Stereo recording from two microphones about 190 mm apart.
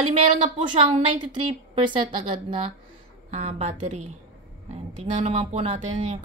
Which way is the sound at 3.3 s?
35° right (ahead or behind).